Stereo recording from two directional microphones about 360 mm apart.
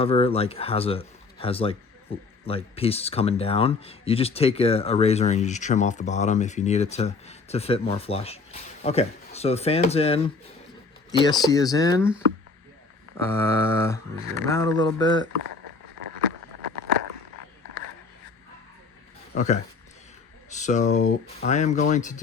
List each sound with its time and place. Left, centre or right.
0.0 s speech: centre
13.3 s speech: centre
19.3 s a man's voice: left